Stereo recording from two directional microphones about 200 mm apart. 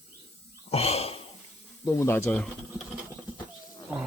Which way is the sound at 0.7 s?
30° left (ahead or behind).